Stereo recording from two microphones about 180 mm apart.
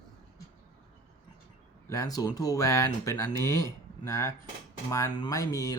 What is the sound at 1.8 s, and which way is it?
Speech, 20° left (ahead or behind).